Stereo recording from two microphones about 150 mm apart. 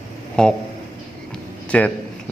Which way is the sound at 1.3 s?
10° left (ahead or behind).